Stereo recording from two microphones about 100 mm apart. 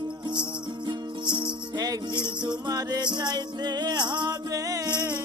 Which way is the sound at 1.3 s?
45° right (ahead or behind).